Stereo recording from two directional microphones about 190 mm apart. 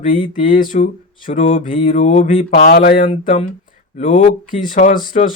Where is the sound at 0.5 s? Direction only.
45° left (ahead or behind).